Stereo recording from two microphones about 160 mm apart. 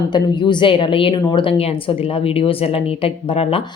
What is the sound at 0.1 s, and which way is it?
A woman's voice, 30° left (ahead or behind).